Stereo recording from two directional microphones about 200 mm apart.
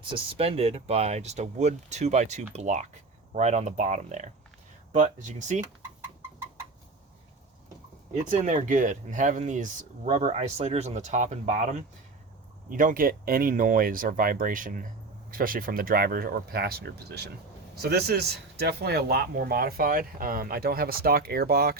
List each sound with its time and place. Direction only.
0.1 s speech: 30° right (ahead or behind)
8.1 s speech: 35° right (ahead or behind)